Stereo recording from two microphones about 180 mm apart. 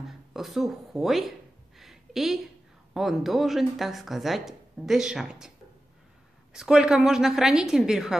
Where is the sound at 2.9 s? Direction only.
Centre (ahead or behind).